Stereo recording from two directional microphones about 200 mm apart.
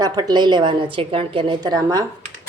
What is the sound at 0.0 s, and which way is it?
Speech, 20° right (ahead or behind).